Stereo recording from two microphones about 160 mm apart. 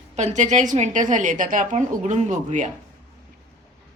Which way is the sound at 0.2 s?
50° right (ahead or behind).